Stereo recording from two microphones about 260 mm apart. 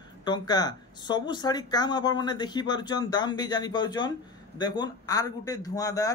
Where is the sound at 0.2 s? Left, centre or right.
Centre.